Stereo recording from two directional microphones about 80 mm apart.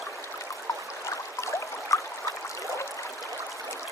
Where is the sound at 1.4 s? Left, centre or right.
Left.